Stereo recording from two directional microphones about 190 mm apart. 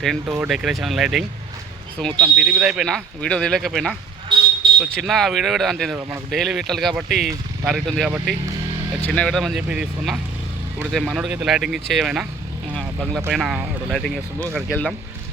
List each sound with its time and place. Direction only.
0.0 s speech: centre (ahead or behind)
2.2 s speech: 5° right (ahead or behind)
4.6 s smoke detector: 25° right (ahead or behind)
4.9 s speech: centre (ahead or behind)